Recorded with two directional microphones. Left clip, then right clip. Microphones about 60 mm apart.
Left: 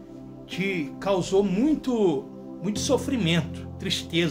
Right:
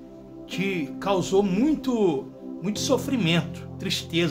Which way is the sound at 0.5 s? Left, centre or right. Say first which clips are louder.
Even; right.